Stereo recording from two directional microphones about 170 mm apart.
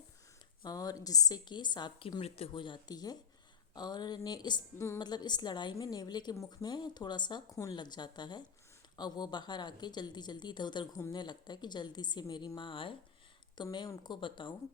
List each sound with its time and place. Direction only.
0.6 s a woman's voice: 20° left (ahead or behind)